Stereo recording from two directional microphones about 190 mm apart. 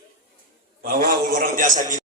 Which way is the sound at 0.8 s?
50° right (ahead or behind).